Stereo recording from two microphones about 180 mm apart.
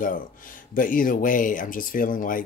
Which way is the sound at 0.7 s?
50° left (ahead or behind).